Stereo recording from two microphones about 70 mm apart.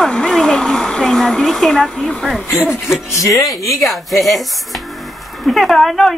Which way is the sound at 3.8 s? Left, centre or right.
Centre.